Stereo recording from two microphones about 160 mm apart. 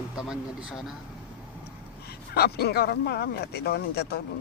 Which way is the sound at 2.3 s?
80° left.